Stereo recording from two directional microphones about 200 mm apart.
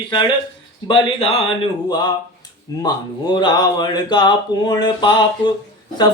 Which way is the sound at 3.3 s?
20° left (ahead or behind).